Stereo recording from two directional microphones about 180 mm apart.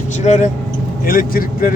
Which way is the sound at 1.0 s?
55° left (ahead or behind).